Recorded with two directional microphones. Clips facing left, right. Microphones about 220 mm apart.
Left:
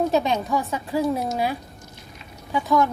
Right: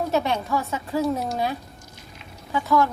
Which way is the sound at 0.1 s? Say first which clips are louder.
Left 2 dB; 15° left (ahead or behind).